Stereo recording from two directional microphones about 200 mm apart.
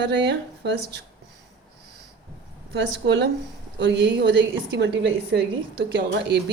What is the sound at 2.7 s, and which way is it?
Speech, 60° right (ahead or behind).